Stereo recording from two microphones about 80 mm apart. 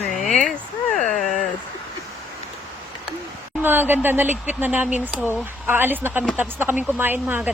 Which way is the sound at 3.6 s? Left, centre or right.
Right.